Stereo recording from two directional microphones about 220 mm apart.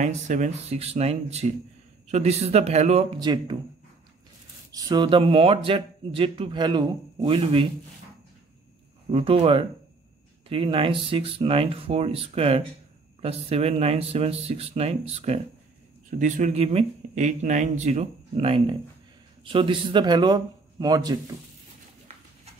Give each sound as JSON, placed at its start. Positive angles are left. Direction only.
{"t": 0.0, "sound": "speech", "side_deg": -35}
{"t": 4.7, "sound": "speech", "side_deg": -15}
{"t": 9.1, "sound": "speech", "side_deg": -25}